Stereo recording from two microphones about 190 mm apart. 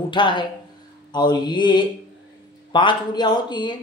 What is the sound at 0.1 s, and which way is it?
A man's voice, 25° left (ahead or behind).